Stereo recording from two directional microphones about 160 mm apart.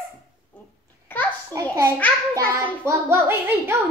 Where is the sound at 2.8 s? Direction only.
15° right (ahead or behind).